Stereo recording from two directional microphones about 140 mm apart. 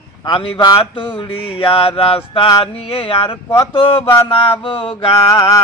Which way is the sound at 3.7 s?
40° left (ahead or behind).